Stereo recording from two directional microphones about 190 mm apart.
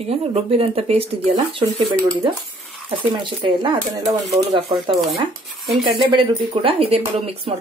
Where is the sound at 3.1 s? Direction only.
25° right (ahead or behind).